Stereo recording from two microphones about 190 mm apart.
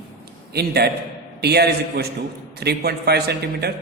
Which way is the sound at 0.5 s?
60° right (ahead or behind).